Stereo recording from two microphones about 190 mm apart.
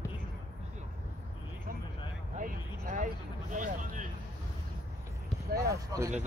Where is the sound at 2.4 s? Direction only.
40° right (ahead or behind).